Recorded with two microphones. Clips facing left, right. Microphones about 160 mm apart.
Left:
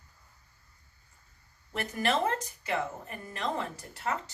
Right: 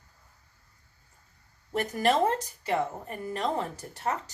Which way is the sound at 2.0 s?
35° right (ahead or behind).